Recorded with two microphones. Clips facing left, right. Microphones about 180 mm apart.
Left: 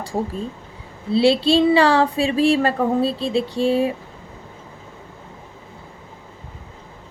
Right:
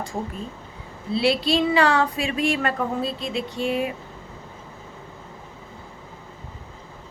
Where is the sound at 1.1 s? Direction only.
30° left (ahead or behind).